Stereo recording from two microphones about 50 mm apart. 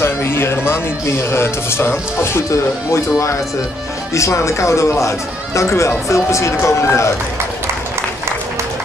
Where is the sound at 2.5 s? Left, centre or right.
Left.